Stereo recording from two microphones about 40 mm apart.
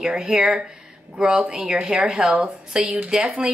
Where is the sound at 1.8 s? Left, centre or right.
Right.